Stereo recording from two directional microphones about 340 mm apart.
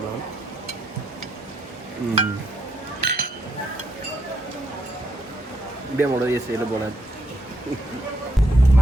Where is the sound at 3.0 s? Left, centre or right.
Right.